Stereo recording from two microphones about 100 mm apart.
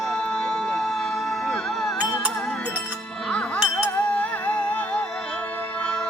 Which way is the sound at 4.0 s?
15° left (ahead or behind).